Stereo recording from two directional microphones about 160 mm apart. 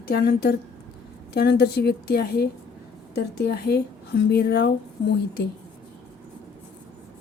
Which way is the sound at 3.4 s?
90° left.